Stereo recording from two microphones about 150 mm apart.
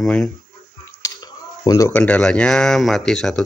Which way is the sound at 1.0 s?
20° left (ahead or behind).